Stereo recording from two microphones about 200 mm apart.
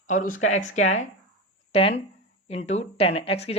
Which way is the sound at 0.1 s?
40° left (ahead or behind).